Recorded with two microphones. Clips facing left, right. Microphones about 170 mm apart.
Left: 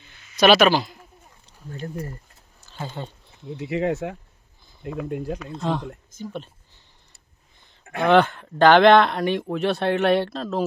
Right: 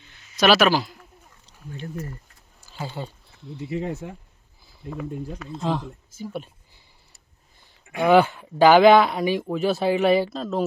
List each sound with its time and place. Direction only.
0.3 s speech: centre (ahead or behind)
2.6 s a sound: 10° right (ahead or behind)
3.6 s speech: 90° left
5.0 s speech: 80° left
5.4 s speech: centre (ahead or behind)
6.1 s a sound: 10° right (ahead or behind)
7.9 s speech: 5° right (ahead or behind)